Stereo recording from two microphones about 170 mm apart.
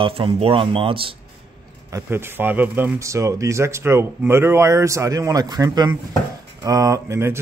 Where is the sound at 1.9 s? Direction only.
15° right (ahead or behind).